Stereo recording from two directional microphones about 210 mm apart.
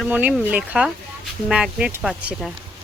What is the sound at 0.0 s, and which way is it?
Speech, 5° right (ahead or behind).